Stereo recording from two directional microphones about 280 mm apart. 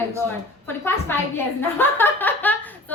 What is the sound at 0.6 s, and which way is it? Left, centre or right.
A woman's voice, centre.